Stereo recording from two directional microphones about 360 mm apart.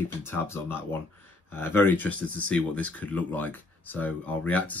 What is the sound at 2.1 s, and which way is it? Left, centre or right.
Speech, right.